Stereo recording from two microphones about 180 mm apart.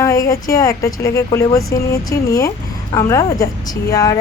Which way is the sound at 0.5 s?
15° left (ahead or behind).